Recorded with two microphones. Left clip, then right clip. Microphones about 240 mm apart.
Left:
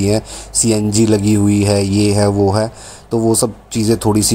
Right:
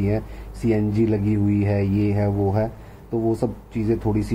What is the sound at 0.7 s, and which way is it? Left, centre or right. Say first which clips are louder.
Speech: left 6 dB; left.